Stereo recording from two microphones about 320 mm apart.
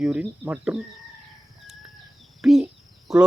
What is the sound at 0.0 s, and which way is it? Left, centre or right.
Speech, centre.